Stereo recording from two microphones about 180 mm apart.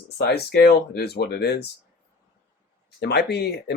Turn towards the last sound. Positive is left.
turn(degrees=65)  # may be behind; listen again after turning